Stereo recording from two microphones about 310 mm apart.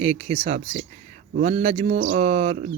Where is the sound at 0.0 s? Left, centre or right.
Right.